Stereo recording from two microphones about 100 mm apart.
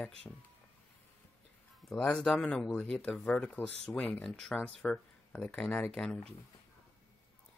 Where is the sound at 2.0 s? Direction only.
10° left (ahead or behind).